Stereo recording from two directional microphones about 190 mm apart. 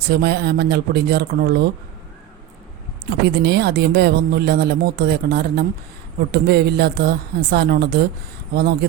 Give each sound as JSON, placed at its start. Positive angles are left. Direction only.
{"t": 0.1, "sound": "speech", "side_deg": -60}
{"t": 3.1, "sound": "speech", "side_deg": -55}